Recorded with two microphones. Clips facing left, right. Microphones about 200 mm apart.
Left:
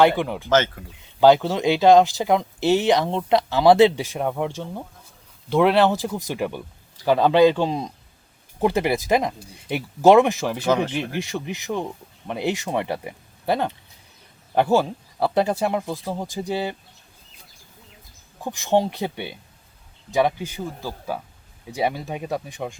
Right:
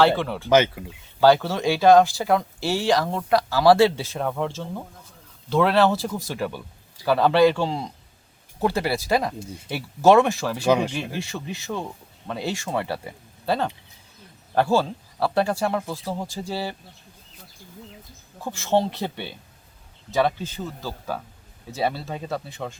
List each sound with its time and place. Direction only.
0.2 s speech: 15° left (ahead or behind)
0.5 s speech: 10° right (ahead or behind)
1.2 s speech: 15° left (ahead or behind)
10.7 s speech: 10° right (ahead or behind)
11.1 s speech: 15° left (ahead or behind)
18.4 s speech: 15° left (ahead or behind)